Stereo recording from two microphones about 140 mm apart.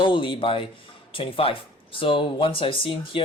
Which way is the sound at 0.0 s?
35° left (ahead or behind).